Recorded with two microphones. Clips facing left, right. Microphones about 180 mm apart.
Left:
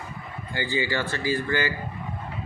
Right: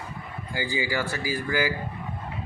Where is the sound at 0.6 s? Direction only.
10° right (ahead or behind).